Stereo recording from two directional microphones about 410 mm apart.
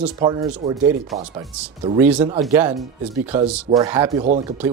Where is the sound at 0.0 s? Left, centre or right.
Centre.